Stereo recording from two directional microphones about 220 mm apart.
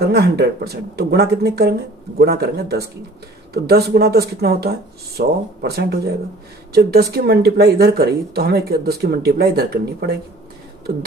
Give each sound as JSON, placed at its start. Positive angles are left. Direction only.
{"t": 0.0, "sound": "speech", "side_deg": -45}